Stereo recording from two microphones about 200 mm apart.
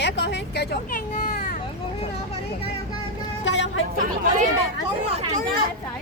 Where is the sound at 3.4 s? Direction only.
65° left (ahead or behind).